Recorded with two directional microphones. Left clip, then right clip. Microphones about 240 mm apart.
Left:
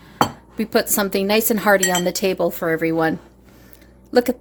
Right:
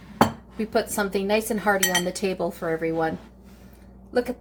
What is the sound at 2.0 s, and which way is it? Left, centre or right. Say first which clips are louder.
A woman's voice: left 7 dB; left.